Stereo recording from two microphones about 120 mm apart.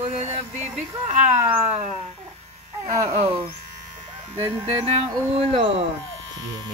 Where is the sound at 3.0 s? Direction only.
55° right (ahead or behind).